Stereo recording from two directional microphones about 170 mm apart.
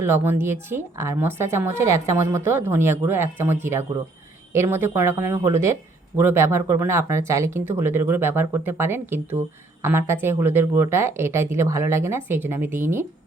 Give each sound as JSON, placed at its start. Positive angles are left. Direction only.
{"t": 0.0, "sound": "a woman's voice", "side_deg": -15}